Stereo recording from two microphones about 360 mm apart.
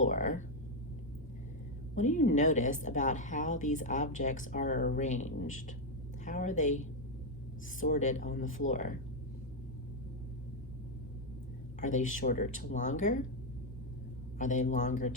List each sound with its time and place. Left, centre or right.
0.1 s speech: left
2.0 s a woman's voice: left
11.8 s a woman's voice: left
14.3 s a woman's voice: left